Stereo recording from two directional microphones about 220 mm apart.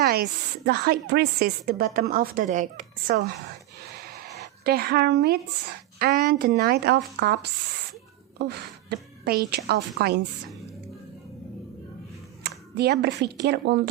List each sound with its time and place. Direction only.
0.0 s a woman's voice: 45° right (ahead or behind)
4.2 s a sound: 45° right (ahead or behind)
6.0 s a woman's voice: 45° right (ahead or behind)
12.4 s speech: 50° right (ahead or behind)